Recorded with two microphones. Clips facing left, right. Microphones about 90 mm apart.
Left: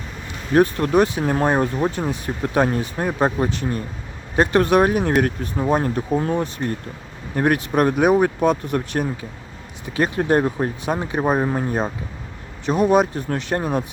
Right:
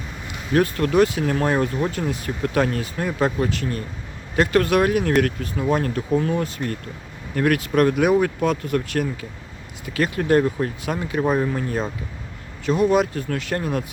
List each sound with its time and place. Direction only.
0.5 s speech: 25° left (ahead or behind)
12.7 s speech: 45° left (ahead or behind)
13.1 s speech: 30° left (ahead or behind)